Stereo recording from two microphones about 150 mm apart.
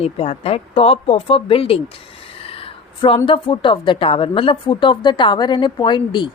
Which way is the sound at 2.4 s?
40° left (ahead or behind).